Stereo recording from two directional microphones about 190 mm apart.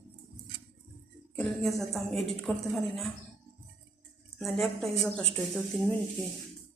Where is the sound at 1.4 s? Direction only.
Centre (ahead or behind).